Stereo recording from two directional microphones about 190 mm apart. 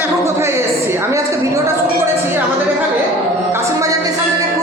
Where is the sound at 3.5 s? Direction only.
15° right (ahead or behind).